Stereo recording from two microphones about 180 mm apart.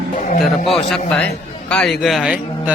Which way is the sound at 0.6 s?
30° left (ahead or behind).